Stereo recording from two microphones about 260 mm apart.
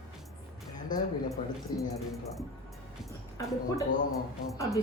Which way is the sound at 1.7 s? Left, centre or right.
Centre.